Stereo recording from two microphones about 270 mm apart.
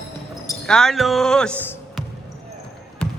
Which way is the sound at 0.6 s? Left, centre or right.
Centre.